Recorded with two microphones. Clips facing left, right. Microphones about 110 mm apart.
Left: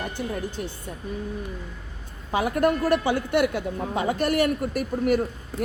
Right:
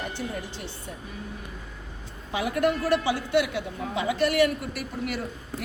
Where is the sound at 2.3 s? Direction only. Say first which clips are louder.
Left 3 dB; 45° left (ahead or behind).